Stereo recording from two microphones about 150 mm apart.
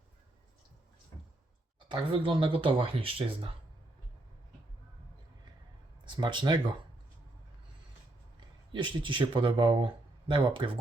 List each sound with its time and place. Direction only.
1.9 s speech: 35° right (ahead or behind)
6.1 s speech: 30° right (ahead or behind)
8.7 s speech: 30° right (ahead or behind)